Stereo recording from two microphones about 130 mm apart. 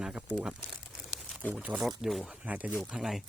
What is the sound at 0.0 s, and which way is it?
Crumpling, 10° right (ahead or behind).